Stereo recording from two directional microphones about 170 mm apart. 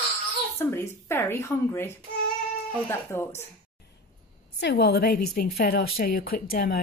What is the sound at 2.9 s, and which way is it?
Speech, 15° left (ahead or behind).